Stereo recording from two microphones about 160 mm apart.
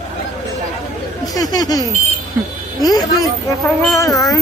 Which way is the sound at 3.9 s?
20° left (ahead or behind).